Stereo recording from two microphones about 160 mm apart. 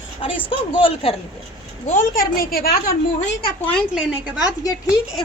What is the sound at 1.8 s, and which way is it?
Speech, 60° left (ahead or behind).